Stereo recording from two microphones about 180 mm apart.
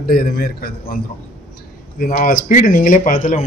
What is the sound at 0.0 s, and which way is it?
Speech, 55° left (ahead or behind).